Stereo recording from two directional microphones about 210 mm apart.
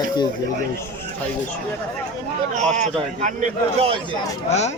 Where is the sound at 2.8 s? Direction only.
35° right (ahead or behind).